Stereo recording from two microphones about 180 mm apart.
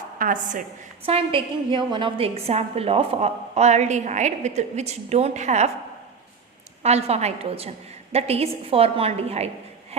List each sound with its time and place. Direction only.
0.2 s a woman's voice: 45° right (ahead or behind)
1.0 s a woman's voice: 30° right (ahead or behind)
6.8 s a woman's voice: 35° right (ahead or behind)